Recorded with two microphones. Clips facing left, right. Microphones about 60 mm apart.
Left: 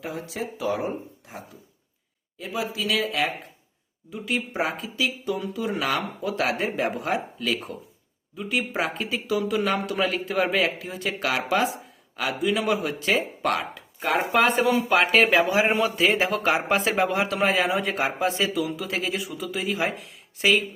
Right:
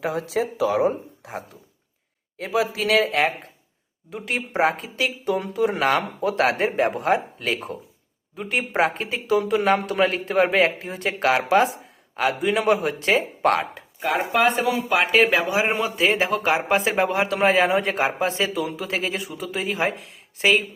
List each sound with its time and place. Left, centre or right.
0.0 s speech: right
2.4 s speech: right
14.0 s speech: centre
16.1 s speech: right